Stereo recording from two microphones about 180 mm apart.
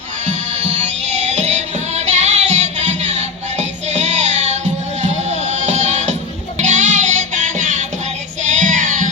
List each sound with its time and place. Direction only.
1.3 s music: 40° right (ahead or behind)
8.4 s child singing: 45° right (ahead or behind)